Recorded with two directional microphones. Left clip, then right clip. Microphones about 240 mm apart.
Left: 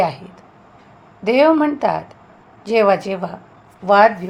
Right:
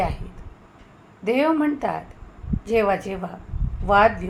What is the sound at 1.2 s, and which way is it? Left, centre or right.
A woman's voice, left.